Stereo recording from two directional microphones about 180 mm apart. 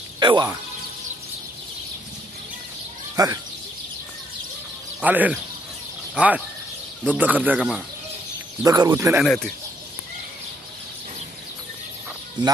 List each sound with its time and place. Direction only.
0.2 s speech: 25° right (ahead or behind)
3.2 s speech: 20° right (ahead or behind)
5.0 s speech: 10° right (ahead or behind)
8.6 s speech: 20° right (ahead or behind)
9.2 s speech: 5° left (ahead or behind)